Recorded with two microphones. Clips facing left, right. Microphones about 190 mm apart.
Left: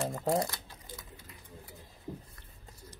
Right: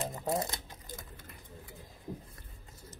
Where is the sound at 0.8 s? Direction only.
50° right (ahead or behind).